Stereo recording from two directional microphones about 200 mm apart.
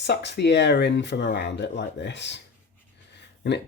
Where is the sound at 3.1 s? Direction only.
60° left (ahead or behind).